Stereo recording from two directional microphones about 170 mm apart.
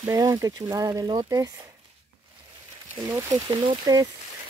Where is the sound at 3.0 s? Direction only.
20° right (ahead or behind).